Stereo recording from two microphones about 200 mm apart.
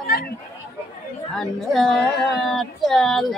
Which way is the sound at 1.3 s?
Centre (ahead or behind).